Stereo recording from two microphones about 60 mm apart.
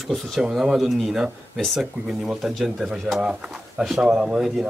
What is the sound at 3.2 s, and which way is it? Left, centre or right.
A man's voice, centre.